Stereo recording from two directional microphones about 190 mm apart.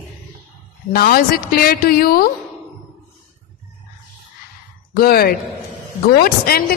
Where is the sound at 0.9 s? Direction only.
50° left (ahead or behind).